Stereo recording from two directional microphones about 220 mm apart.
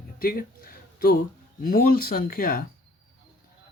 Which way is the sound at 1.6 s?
40° left (ahead or behind).